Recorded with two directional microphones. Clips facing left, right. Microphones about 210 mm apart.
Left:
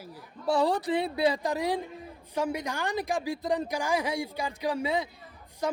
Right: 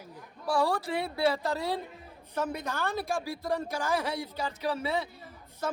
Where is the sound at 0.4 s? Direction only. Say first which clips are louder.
Left 3 dB; 20° left (ahead or behind).